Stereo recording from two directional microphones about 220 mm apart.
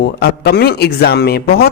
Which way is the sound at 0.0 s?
45° left (ahead or behind).